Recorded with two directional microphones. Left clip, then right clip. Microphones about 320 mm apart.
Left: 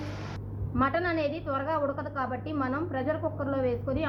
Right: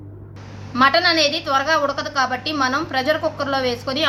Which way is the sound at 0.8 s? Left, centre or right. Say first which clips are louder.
Right 12 dB; centre.